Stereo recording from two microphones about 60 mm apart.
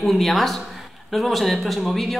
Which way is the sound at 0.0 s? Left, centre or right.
Centre.